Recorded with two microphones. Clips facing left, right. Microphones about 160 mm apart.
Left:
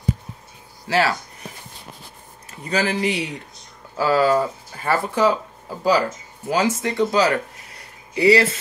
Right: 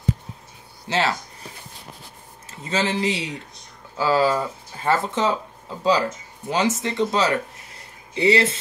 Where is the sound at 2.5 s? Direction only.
25° right (ahead or behind).